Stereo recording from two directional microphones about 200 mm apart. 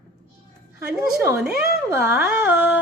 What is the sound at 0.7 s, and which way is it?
A woman's voice, 10° right (ahead or behind).